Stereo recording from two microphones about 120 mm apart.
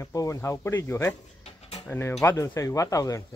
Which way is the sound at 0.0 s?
30° left (ahead or behind).